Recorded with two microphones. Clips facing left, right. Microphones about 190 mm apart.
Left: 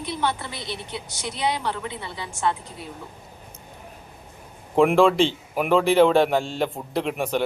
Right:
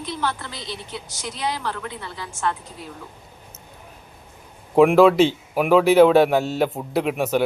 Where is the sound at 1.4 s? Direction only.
20° left (ahead or behind).